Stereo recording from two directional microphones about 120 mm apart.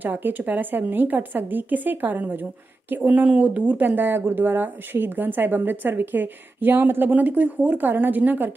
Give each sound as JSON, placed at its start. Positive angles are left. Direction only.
{"t": 0.0, "sound": "speech", "side_deg": -15}